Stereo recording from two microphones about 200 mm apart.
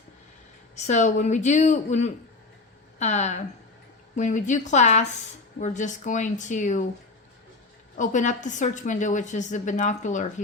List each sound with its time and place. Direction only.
0.8 s a woman's voice: 35° left (ahead or behind)
7.9 s a woman's voice: 40° left (ahead or behind)